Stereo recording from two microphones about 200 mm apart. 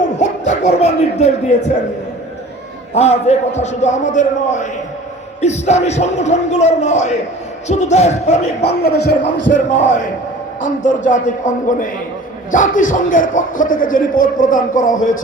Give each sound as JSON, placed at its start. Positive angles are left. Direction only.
{"t": 0.2, "sound": "speech", "side_deg": 35}
{"t": 2.9, "sound": "a man's voice", "side_deg": 35}
{"t": 8.8, "sound": "a man's voice", "side_deg": 55}
{"t": 9.5, "sound": "a man's voice", "side_deg": 35}